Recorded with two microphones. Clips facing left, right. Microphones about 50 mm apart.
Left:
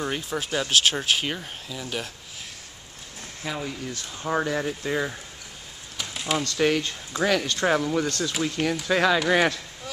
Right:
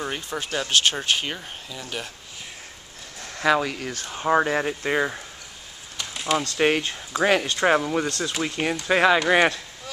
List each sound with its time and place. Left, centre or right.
0.0 s speech: centre
3.3 s speech: right
3.9 s speech: right
5.9 s a sound: centre
6.6 s speech: right